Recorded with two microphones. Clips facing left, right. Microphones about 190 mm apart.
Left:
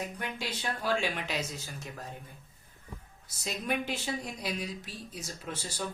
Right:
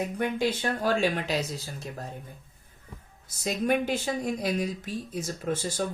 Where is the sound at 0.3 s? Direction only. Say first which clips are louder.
Right 9 dB; 45° right (ahead or behind).